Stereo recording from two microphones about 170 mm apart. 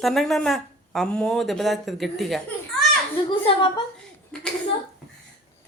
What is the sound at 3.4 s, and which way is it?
Speech, 30° left (ahead or behind).